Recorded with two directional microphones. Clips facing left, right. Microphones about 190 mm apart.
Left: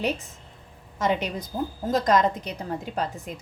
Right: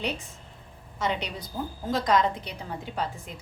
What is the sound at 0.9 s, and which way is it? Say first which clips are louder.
A woman's voice: left 5 dB; 50° left (ahead or behind).